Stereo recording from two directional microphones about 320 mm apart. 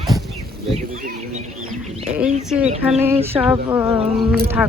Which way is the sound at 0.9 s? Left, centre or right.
Right.